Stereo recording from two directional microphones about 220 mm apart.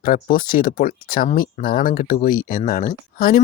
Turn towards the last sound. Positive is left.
turn(degrees=40)  # may be behind; listen again after turning